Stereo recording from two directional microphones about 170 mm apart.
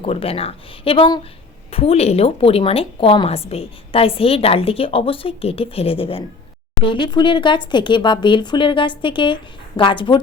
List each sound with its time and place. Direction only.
0.0 s a woman's voice: 35° left (ahead or behind)